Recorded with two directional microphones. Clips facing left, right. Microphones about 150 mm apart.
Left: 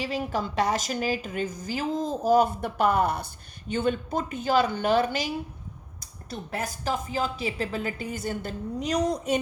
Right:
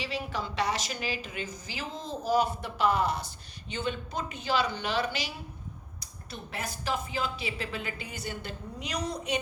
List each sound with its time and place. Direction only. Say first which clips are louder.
0.0 s a woman's voice: left 5 dB; 45° left (ahead or behind)